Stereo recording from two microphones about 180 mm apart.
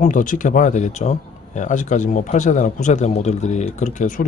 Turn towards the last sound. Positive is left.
turn(degrees=45)  # may be behind; listen again after turning